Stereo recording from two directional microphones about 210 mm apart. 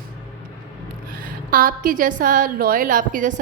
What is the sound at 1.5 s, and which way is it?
A woman's voice, 40° right (ahead or behind).